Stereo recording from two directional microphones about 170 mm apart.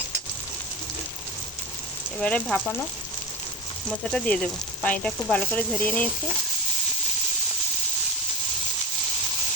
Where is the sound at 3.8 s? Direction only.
5° left (ahead or behind).